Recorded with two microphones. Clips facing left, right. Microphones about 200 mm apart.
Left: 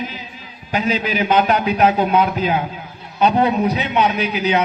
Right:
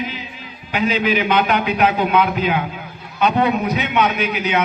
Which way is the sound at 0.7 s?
40° left (ahead or behind).